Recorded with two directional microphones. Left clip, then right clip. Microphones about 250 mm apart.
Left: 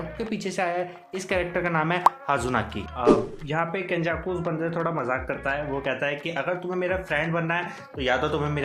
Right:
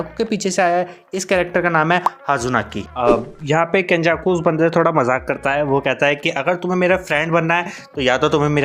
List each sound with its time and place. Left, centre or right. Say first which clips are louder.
0.2 s speech: right 11 dB; right